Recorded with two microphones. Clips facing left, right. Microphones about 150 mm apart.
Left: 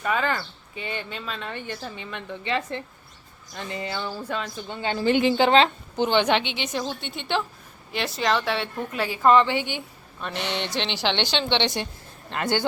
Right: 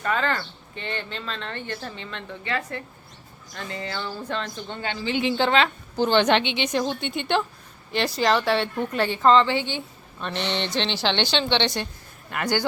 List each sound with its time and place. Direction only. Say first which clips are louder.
0.0 s a woman's voice: even; 10° left (ahead or behind)
4.9 s speech: left 5 dB; 50° left (ahead or behind)
5.5 s a woman's voice: left 3 dB; 30° left (ahead or behind)
6.0 s a woman's voice: right 2 dB; 10° left (ahead or behind)